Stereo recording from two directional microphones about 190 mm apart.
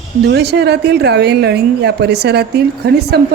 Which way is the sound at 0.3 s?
60° right (ahead or behind).